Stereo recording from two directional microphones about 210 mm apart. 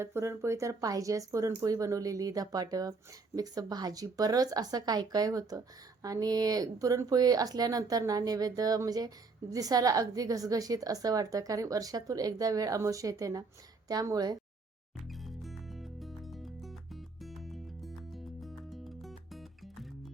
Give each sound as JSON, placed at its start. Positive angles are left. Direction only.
{"t": 0.0, "sound": "speech", "side_deg": -10}
{"t": 15.1, "sound": "music", "side_deg": 0}